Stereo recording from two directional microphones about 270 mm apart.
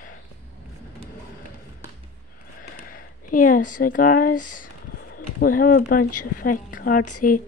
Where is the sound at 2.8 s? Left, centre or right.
Left.